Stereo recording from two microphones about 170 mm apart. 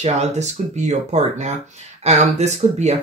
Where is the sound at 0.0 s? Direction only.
40° right (ahead or behind).